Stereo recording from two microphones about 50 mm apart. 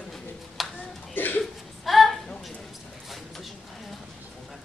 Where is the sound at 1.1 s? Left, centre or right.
Left.